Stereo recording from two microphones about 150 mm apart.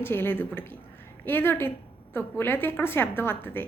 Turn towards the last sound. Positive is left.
turn(degrees=15)  # may be behind; listen again after turning